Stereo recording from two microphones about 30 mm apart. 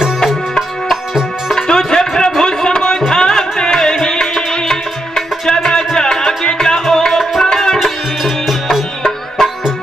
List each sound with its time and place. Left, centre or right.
1.7 s music: left
7.8 s music: centre
9.4 s music: centre